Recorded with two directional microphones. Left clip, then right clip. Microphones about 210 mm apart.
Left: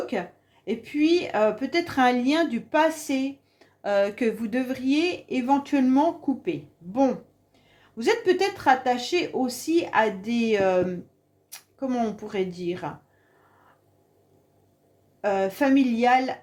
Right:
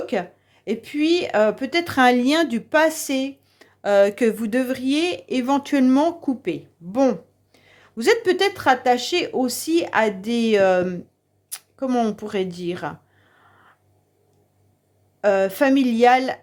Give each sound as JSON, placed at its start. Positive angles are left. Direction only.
{"t": 0.0, "sound": "speech", "side_deg": -45}
{"t": 15.2, "sound": "speech", "side_deg": -45}